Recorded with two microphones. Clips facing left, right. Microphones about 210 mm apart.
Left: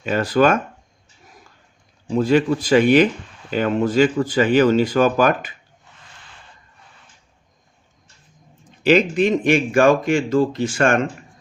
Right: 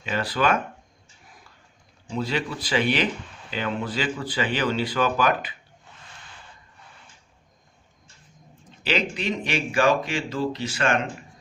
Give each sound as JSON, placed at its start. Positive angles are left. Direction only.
{"t": 0.0, "sound": "speech", "side_deg": 45}
{"t": 2.0, "sound": "speech", "side_deg": 50}
{"t": 8.8, "sound": "speech", "side_deg": 50}